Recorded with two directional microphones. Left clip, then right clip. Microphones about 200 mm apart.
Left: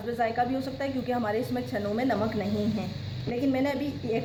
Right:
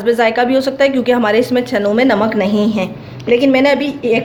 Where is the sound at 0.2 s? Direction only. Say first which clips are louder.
Right 15 dB; 40° right (ahead or behind).